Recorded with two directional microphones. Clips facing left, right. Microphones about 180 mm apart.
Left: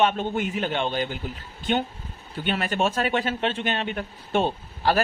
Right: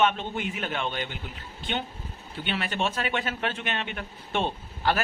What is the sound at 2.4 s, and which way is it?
Speech, 40° left (ahead or behind).